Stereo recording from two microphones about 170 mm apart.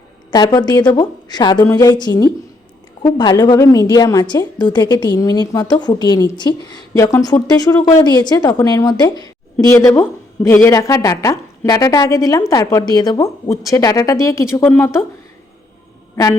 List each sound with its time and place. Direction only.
0.3 s speech: 20° left (ahead or behind)